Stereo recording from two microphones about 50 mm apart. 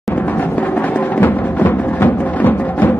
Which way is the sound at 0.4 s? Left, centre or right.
Left.